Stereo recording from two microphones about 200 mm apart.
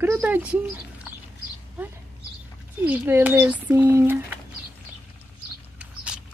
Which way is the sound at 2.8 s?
10° right (ahead or behind).